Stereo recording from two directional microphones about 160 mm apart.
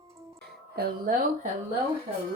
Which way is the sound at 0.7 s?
75° right (ahead or behind).